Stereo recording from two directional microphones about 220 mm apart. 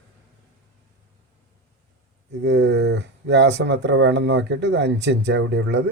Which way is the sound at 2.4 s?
50° right (ahead or behind).